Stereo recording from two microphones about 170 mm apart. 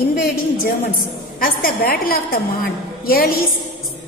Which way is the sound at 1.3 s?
60° left (ahead or behind).